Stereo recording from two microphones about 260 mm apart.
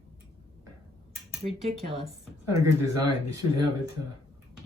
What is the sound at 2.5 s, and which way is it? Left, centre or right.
Speech, centre.